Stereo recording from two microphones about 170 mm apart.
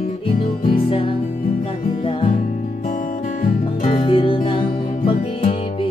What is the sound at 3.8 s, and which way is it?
Music, 35° left (ahead or behind).